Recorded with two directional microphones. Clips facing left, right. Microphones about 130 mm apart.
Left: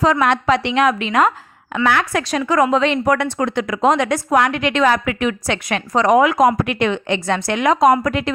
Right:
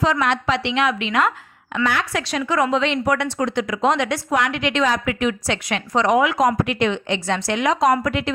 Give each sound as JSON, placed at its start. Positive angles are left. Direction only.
{"t": 0.0, "sound": "a woman's voice", "side_deg": 45}
{"t": 1.7, "sound": "a woman's voice", "side_deg": 55}